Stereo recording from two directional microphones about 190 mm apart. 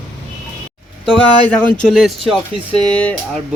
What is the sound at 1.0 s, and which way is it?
Speech, 5° left (ahead or behind).